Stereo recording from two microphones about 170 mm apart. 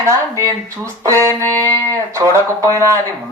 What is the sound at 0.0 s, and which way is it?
Speech, 15° right (ahead or behind).